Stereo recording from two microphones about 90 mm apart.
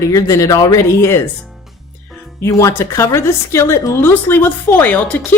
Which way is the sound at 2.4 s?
35° left (ahead or behind).